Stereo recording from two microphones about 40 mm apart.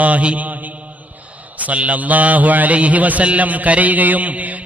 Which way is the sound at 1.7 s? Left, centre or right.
Right.